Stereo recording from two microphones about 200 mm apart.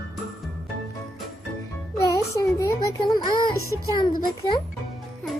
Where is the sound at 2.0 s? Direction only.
15° left (ahead or behind).